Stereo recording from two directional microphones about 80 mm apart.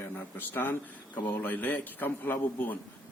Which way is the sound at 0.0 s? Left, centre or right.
Left.